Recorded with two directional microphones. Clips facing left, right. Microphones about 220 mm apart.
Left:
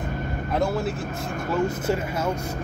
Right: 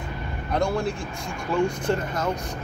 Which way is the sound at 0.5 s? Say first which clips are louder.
Right 1 dB; 5° left (ahead or behind).